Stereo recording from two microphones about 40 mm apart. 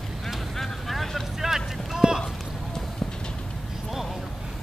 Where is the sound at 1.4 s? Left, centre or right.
Centre.